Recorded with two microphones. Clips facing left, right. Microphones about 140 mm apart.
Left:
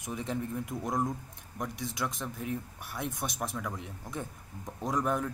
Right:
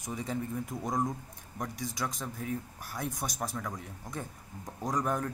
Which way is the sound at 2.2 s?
Centre (ahead or behind).